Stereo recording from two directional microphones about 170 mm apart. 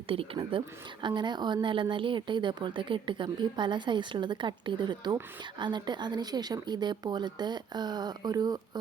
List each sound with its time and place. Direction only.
0.1 s speech: 30° right (ahead or behind)